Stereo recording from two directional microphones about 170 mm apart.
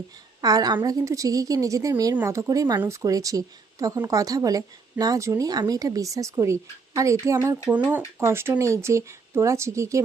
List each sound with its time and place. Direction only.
0.4 s a woman's voice: 20° right (ahead or behind)